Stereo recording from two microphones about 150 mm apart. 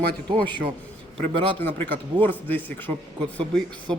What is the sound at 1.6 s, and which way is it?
Speech, 15° left (ahead or behind).